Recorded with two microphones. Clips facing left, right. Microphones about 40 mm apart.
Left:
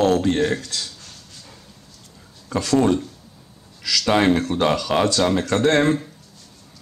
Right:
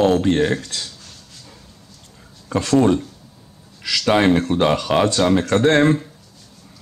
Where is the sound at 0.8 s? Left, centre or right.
Centre.